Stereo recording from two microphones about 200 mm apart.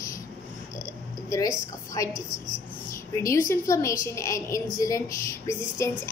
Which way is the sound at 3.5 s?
15° left (ahead or behind).